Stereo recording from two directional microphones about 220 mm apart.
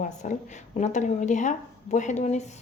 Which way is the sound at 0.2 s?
35° left (ahead or behind).